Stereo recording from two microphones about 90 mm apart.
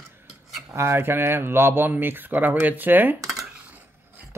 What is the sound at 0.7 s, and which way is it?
Speech, 25° right (ahead or behind).